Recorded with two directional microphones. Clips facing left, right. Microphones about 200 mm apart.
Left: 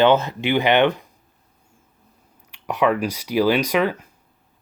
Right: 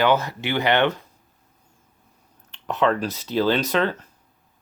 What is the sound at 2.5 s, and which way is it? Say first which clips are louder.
Speech: left 2 dB; 10° left (ahead or behind).